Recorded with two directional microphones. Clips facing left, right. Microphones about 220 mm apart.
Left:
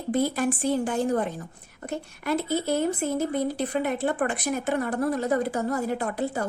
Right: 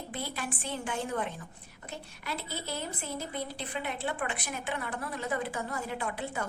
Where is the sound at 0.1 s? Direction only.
45° left (ahead or behind).